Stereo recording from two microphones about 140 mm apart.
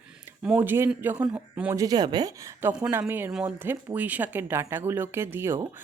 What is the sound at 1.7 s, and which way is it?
A woman's voice, 25° right (ahead or behind).